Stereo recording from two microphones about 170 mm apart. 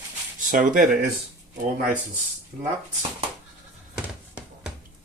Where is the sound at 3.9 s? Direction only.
5° right (ahead or behind).